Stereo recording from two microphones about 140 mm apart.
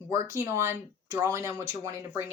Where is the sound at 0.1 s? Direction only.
20° right (ahead or behind).